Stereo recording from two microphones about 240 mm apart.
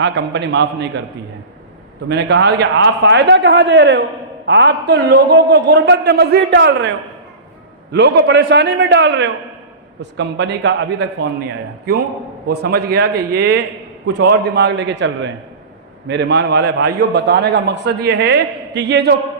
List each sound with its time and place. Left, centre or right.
0.0 s a man's voice: right
2.0 s a man's voice: right
7.9 s a man's voice: right
12.5 s a man's voice: right